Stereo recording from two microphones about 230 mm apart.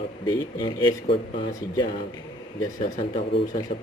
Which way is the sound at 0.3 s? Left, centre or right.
Centre.